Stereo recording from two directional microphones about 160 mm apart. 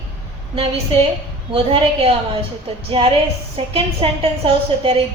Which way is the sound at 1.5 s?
35° right (ahead or behind).